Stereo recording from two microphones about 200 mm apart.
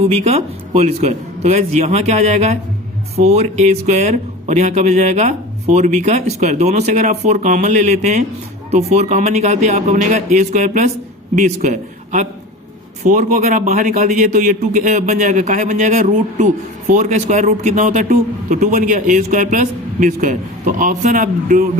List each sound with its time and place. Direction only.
0.0 s a man's voice: 30° right (ahead or behind)